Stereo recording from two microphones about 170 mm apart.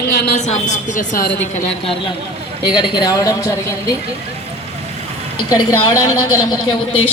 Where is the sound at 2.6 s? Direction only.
25° left (ahead or behind).